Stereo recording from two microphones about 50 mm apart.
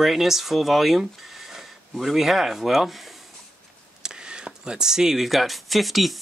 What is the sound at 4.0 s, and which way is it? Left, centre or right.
Speech, centre.